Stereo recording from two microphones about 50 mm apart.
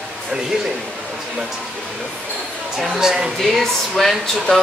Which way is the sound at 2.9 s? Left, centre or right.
Centre.